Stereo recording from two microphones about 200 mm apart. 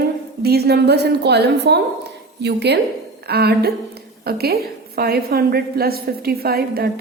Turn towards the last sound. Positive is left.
turn(degrees=-50)  # may be behind; listen again after turning